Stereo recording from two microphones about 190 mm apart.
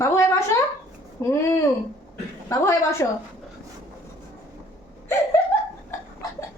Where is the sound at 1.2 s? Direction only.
15° left (ahead or behind).